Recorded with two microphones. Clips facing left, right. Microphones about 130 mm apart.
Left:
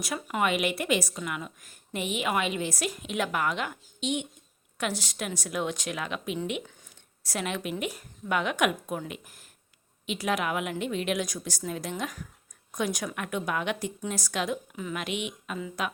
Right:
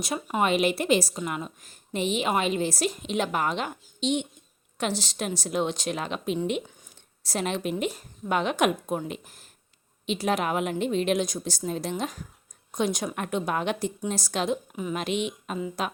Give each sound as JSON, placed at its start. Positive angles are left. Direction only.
{"t": 0.0, "sound": "a woman's voice", "side_deg": -25}
{"t": 14.9, "sound": "a woman's voice", "side_deg": -35}